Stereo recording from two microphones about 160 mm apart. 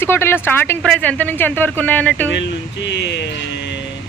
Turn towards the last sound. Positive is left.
turn(degrees=90)